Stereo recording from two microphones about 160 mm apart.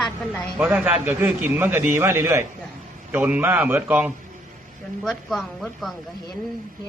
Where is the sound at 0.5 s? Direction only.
10° right (ahead or behind).